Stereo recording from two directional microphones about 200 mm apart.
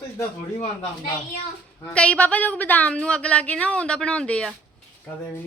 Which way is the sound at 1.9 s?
5° left (ahead or behind).